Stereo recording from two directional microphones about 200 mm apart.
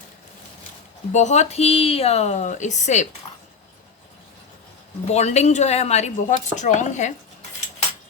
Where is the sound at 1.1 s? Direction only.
35° left (ahead or behind).